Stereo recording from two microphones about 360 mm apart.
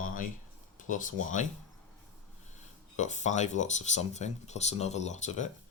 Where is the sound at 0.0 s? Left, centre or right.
Left.